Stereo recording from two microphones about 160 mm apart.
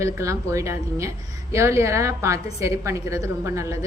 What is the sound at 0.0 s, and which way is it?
A woman's voice, 20° right (ahead or behind).